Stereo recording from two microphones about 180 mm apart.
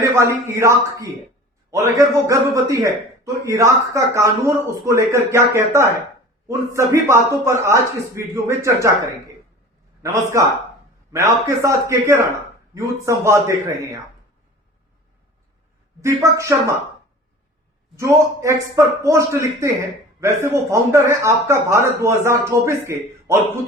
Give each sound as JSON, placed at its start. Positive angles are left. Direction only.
{"t": 0.0, "sound": "a man's voice", "side_deg": -15}
{"t": 10.0, "sound": "a man's voice", "side_deg": -15}
{"t": 16.0, "sound": "a man's voice", "side_deg": -15}
{"t": 17.9, "sound": "a man's voice", "side_deg": -15}